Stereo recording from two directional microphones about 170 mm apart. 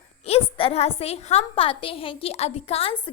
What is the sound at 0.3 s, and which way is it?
A woman's voice, 35° left (ahead or behind).